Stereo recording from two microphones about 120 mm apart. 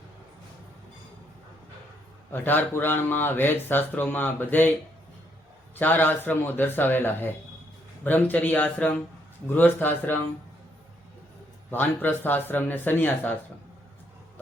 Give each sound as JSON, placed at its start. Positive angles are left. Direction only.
{"t": 2.3, "sound": "speech", "side_deg": 15}
{"t": 5.8, "sound": "speech", "side_deg": 15}
{"t": 11.7, "sound": "speech", "side_deg": 15}